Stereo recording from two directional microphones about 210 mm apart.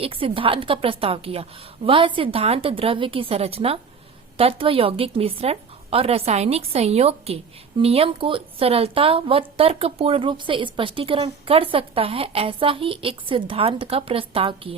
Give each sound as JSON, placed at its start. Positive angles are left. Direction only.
{"t": 0.0, "sound": "a woman's voice", "side_deg": -25}